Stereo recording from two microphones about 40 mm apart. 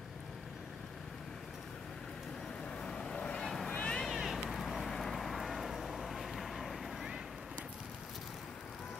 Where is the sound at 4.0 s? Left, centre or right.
Centre.